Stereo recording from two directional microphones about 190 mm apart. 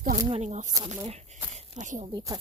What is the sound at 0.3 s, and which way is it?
Speech, 35° right (ahead or behind).